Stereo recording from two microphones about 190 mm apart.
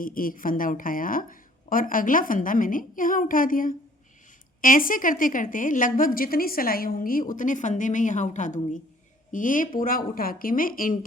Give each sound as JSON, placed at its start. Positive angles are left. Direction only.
{"t": 0.0, "sound": "a woman's voice", "side_deg": 45}